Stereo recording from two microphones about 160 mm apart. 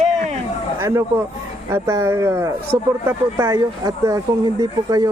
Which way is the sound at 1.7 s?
15° right (ahead or behind).